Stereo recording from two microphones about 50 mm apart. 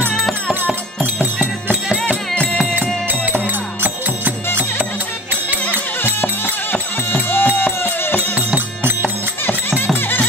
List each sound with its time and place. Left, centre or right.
0.1 s music: centre
1.2 s music: right
3.4 s music: right
5.3 s music: right
6.2 s music: left
8.5 s music: right
9.5 s music: left